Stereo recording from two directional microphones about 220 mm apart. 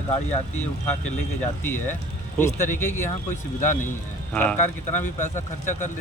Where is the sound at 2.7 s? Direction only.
10° left (ahead or behind).